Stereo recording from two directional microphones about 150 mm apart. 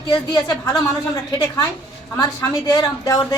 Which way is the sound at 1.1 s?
25° left (ahead or behind).